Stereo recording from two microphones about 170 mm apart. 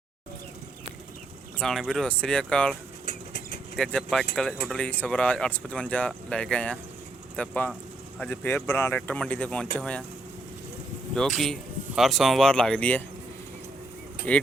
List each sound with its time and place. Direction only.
1.5 s speech: centre (ahead or behind)
3.1 s a sound: 65° left (ahead or behind)
3.8 s speech: 5° left (ahead or behind)
11.1 s speech: centre (ahead or behind)
14.3 s speech: 10° left (ahead or behind)